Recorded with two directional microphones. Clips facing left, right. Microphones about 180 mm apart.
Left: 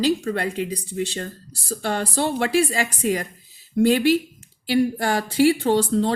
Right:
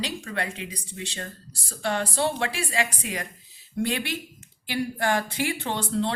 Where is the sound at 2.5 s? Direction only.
40° left (ahead or behind).